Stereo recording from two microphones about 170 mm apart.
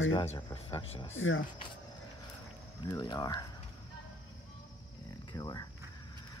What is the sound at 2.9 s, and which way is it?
Speech, 20° left (ahead or behind).